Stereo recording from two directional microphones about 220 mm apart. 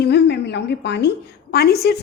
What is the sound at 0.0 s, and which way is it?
A woman's voice, 50° left (ahead or behind).